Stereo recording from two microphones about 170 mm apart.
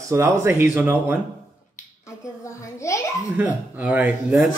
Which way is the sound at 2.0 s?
15° left (ahead or behind).